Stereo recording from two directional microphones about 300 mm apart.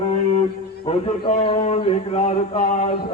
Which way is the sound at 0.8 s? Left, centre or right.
Left.